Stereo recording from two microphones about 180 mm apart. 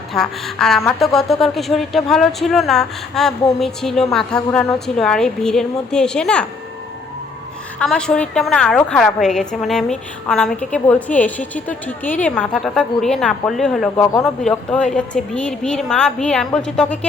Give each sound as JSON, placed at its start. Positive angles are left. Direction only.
{"t": 0.1, "sound": "a woman's voice", "side_deg": 0}
{"t": 7.8, "sound": "a woman's voice", "side_deg": 5}
{"t": 13.9, "sound": "speech", "side_deg": 15}
{"t": 14.8, "sound": "a woman's voice", "side_deg": 5}